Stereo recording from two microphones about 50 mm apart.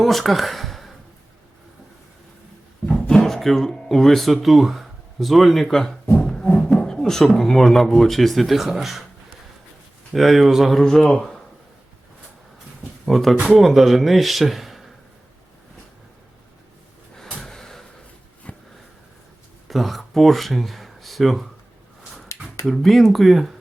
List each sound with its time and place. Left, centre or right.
0.0 s a sound: centre
2.8 s a sound: centre
4.4 s speech: centre
6.2 s music: centre
6.7 s beatboxing: centre
7.3 s speech: centre
10.1 s speech: centre
10.8 s speech: centre
13.1 s speech: centre
17.3 s gasp: centre
18.5 s a sound: left
19.6 s speech: centre
22.7 s speech: centre